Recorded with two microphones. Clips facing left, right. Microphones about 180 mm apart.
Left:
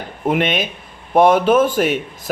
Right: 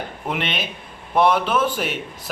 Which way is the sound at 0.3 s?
50° left (ahead or behind).